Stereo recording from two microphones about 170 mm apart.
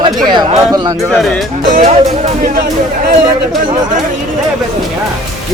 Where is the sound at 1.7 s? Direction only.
50° right (ahead or behind).